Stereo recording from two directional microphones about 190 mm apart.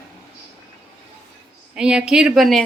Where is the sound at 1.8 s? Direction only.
5° right (ahead or behind).